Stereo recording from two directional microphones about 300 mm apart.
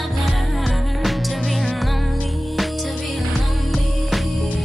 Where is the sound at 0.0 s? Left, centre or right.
Centre.